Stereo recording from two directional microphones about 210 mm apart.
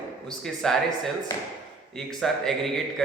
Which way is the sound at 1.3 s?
10° left (ahead or behind).